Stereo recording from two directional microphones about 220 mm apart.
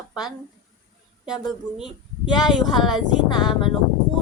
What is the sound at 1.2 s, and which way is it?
Speech, centre (ahead or behind).